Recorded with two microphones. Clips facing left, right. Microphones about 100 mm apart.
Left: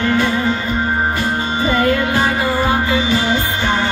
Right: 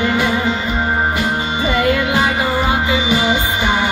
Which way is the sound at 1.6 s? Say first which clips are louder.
Left 1 dB; 40° left (ahead or behind).